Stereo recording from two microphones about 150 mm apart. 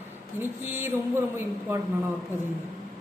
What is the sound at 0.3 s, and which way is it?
Speech, 15° right (ahead or behind).